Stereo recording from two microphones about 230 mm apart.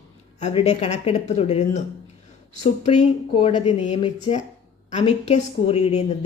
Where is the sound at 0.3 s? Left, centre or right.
Left.